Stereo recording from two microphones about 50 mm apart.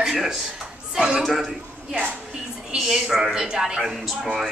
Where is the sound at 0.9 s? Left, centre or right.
Centre.